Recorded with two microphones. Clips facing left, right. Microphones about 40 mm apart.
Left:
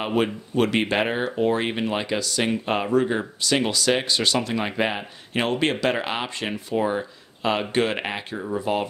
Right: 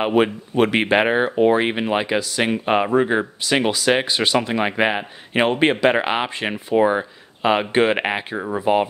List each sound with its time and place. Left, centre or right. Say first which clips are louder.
0.0 s speech: right 5 dB; right
8.4 s speech: right 3 dB; right